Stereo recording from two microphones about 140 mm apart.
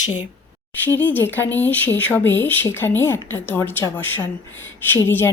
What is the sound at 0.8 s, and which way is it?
Speech, 15° left (ahead or behind).